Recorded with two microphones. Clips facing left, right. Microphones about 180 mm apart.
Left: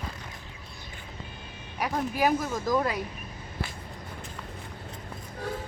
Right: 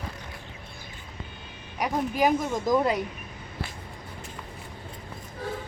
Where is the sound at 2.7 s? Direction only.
20° right (ahead or behind).